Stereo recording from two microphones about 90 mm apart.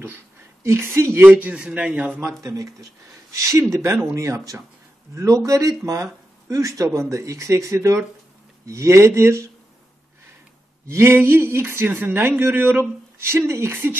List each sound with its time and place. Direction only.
0.7 s speech: 30° right (ahead or behind); by 2.1 s 10° right (ahead or behind)
2.4 s speech: 40° right (ahead or behind)
10.9 s speech: 30° right (ahead or behind)